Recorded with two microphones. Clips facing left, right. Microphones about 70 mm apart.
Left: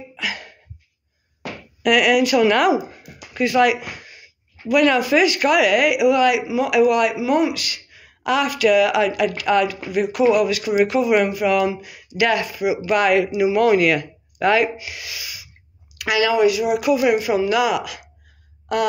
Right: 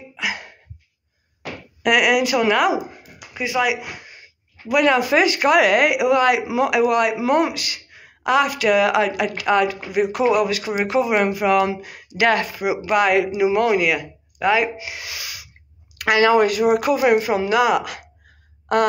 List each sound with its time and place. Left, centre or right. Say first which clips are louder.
0.2 s a sound: right 2 dB; right
1.8 s speech: left 1 dB; right
3.3 s speech: left 4 dB; centre
4.0 s speech: right 1 dB; right
7.2 s speech: even; right
7.5 s a woman's voice: even; right
12.9 s speech: even; right
13.7 s speech: left 3 dB; centre
14.8 s a woman's voice: right 1 dB; right